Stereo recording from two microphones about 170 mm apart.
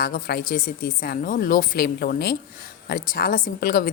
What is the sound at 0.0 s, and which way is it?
A woman's voice, 60° left (ahead or behind).